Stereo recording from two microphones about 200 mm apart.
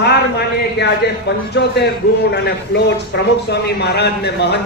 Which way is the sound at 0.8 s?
55° left (ahead or behind).